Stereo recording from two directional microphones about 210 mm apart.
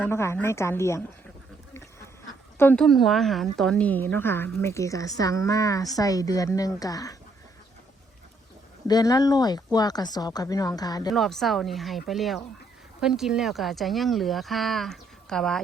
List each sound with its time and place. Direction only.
0.0 s a woman's voice: 10° left (ahead or behind)
2.6 s a woman's voice: 5° left (ahead or behind)
8.9 s speech: 20° left (ahead or behind)
11.1 s speech: centre (ahead or behind)